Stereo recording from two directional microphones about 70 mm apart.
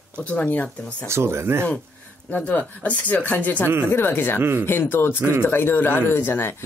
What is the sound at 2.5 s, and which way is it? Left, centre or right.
Speech, left.